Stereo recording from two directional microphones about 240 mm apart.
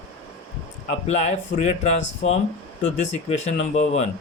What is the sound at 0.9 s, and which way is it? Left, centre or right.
Speech, left.